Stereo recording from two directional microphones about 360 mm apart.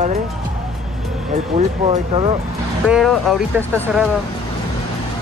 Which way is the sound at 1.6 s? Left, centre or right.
Centre.